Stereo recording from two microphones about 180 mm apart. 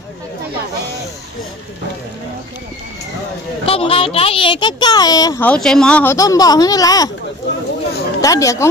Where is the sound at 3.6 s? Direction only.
30° left (ahead or behind).